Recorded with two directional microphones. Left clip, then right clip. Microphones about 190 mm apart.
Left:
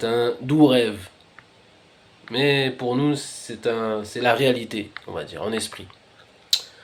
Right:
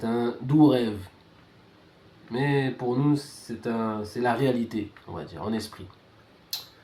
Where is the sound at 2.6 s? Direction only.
50° left (ahead or behind).